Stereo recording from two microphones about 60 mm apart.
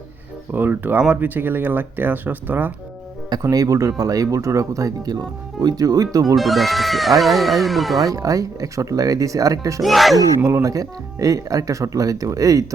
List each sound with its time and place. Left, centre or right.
0.5 s speech: right
3.4 s speech: right
5.5 s speech: right
6.3 s speech: centre
8.0 s speech: right
9.8 s speech: centre
10.6 s speech: right